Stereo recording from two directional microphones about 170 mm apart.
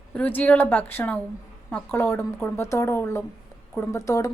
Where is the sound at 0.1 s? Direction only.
10° left (ahead or behind).